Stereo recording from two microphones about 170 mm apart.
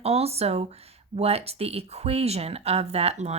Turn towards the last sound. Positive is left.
turn(degrees=-40)  # may be behind; listen again after turning